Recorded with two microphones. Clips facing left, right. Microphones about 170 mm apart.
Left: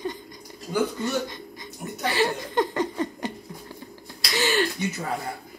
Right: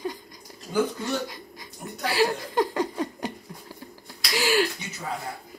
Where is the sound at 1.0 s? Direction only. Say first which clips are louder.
Left 2 dB; 5° right (ahead or behind).